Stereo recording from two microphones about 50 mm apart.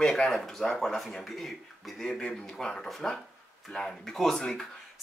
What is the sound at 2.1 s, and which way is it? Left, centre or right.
Speech, centre.